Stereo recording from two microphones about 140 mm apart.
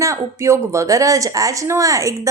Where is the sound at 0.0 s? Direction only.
20° right (ahead or behind).